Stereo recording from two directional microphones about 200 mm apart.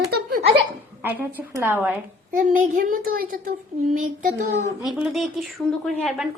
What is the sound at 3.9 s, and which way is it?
Child singing, 40° right (ahead or behind).